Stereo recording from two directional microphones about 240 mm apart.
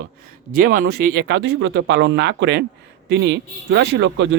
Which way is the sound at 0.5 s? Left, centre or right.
Right.